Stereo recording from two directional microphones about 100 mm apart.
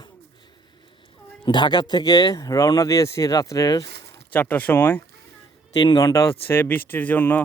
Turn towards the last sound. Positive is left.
turn(degrees=15)  # may be behind; listen again after turning